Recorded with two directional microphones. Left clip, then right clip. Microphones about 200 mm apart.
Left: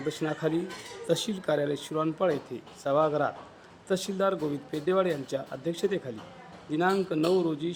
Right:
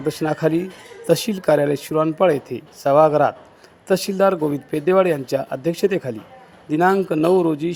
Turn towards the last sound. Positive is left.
turn(degrees=-30)  # may be behind; listen again after turning